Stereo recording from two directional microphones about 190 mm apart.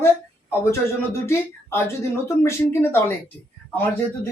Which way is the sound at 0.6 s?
15° left (ahead or behind).